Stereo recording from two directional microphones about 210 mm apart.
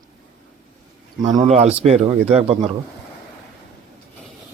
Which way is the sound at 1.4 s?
30° right (ahead or behind).